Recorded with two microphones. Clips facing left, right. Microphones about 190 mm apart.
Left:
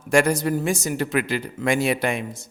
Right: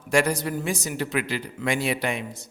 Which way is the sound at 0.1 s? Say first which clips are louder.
Left 4 dB; 50° left (ahead or behind).